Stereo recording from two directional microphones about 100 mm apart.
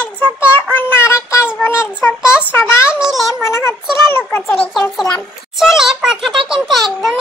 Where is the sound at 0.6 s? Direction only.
20° left (ahead or behind).